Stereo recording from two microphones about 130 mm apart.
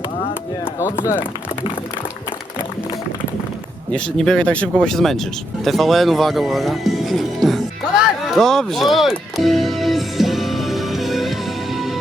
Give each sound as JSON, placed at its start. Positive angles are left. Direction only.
{"t": 0.6, "sound": "speech", "side_deg": 20}
{"t": 3.9, "sound": "speech", "side_deg": 5}
{"t": 8.4, "sound": "music", "side_deg": 5}